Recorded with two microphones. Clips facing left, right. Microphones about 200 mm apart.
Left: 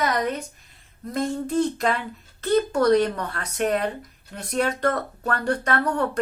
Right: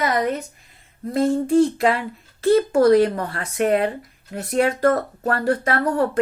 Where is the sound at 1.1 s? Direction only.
25° right (ahead or behind).